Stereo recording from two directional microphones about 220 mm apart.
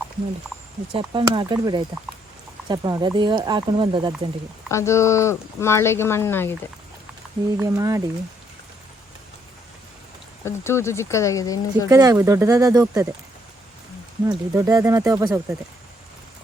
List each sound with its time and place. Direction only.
0.9 s speech: 20° right (ahead or behind)
4.7 s speech: 15° left (ahead or behind)
7.5 s speech: 15° right (ahead or behind)
10.4 s speech: 10° left (ahead or behind)
11.9 s speech: 15° right (ahead or behind)
14.3 s speech: 15° right (ahead or behind)